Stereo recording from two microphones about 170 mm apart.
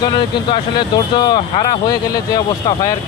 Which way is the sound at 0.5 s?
30° left (ahead or behind).